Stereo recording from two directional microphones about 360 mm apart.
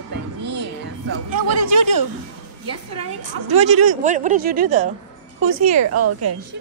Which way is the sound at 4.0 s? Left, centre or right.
Right.